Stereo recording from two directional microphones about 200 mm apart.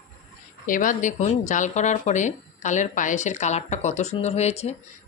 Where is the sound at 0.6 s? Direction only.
40° left (ahead or behind).